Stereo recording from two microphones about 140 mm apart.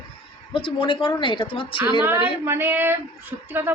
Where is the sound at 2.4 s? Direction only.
15° right (ahead or behind).